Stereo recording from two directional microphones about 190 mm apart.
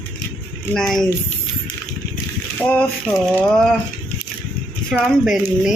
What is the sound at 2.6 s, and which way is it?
A woman's voice, 5° left (ahead or behind).